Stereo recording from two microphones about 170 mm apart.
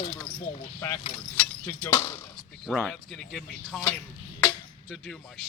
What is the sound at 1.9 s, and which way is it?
Speech, 25° left (ahead or behind).